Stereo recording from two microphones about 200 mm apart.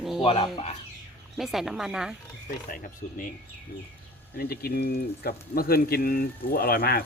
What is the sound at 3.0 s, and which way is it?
Speech, 35° left (ahead or behind).